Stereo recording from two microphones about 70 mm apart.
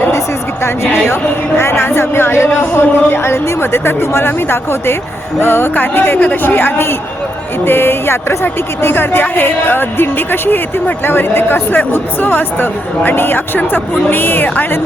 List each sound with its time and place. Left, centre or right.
0.6 s a woman's voice: left